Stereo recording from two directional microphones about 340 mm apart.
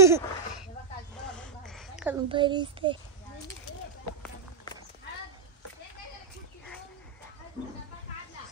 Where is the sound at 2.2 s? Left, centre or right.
Centre.